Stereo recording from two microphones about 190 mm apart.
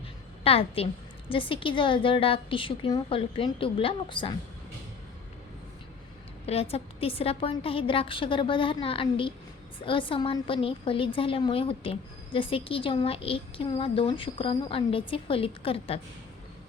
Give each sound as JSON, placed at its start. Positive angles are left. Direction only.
{"t": 0.4, "sound": "a woman's voice", "side_deg": 30}
{"t": 6.4, "sound": "a woman's voice", "side_deg": 30}